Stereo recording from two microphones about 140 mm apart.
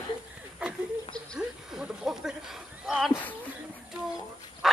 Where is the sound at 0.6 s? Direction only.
5° right (ahead or behind).